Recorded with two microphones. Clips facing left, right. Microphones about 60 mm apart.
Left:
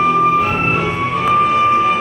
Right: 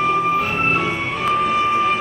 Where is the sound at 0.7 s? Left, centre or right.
Centre.